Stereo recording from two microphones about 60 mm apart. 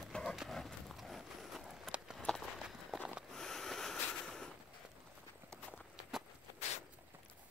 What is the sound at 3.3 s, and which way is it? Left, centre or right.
Snort, centre.